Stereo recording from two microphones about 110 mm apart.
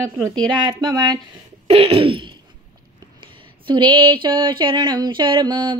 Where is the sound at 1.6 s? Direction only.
65° right (ahead or behind).